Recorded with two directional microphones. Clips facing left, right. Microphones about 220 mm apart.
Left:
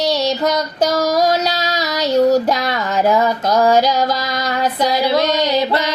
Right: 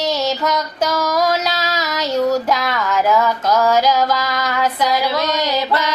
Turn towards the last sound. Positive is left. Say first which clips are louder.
# left 3 dB
turn(degrees=30)  # may be behind; listen again after turning